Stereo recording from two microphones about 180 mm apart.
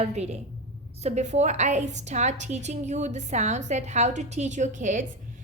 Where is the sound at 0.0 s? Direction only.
35° right (ahead or behind).